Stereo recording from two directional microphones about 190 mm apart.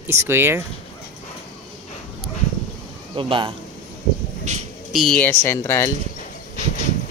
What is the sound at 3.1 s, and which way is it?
Speech, 25° right (ahead or behind).